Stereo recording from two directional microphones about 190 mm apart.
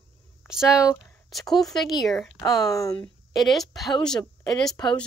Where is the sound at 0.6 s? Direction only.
15° left (ahead or behind).